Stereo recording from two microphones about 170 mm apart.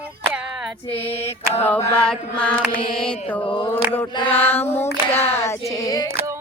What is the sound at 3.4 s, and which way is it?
Mantra, 30° left (ahead or behind).